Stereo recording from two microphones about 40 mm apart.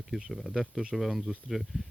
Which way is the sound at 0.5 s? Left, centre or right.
Centre.